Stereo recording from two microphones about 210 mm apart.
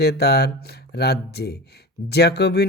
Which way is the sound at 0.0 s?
50° left (ahead or behind).